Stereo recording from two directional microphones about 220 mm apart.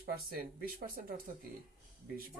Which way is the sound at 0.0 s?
40° right (ahead or behind).